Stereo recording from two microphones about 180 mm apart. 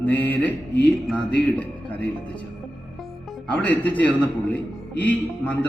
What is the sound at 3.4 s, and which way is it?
A man's voice, 10° left (ahead or behind).